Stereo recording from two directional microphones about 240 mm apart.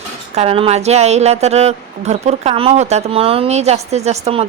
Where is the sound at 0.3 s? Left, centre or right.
Right.